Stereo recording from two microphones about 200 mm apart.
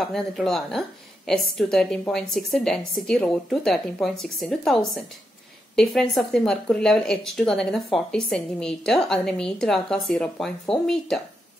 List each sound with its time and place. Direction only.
0.0 s a woman's voice: centre (ahead or behind)